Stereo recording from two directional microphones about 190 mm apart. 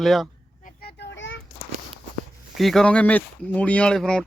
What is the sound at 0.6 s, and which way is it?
Children playing, 55° left (ahead or behind).